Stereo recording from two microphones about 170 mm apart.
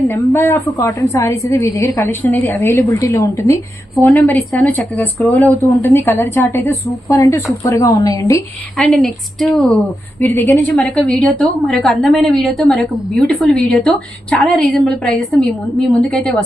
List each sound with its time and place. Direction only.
0.1 s a woman's voice: 10° left (ahead or behind)
8.8 s a woman's voice: centre (ahead or behind)